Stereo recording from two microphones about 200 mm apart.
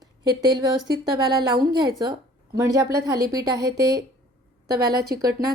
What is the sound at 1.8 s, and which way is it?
A woman's voice, 20° right (ahead or behind).